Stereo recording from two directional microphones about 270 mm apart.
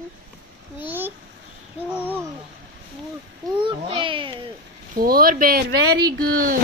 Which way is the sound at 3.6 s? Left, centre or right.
Centre.